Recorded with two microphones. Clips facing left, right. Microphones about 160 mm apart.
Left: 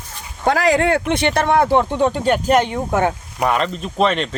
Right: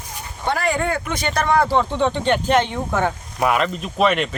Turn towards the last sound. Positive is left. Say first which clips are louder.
# left 1 dB
turn(degrees=-5)  # may be behind; listen again after turning